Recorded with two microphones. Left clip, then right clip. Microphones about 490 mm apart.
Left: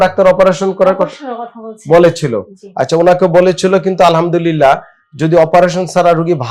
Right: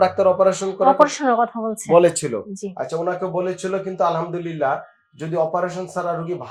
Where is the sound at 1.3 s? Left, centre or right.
Right.